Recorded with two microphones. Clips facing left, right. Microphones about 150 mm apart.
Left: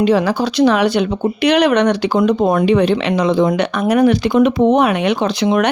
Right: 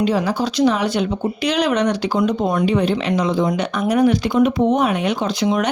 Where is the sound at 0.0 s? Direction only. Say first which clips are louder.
Left 4 dB; 70° left (ahead or behind).